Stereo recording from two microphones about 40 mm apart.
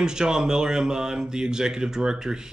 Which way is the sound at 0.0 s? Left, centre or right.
Centre.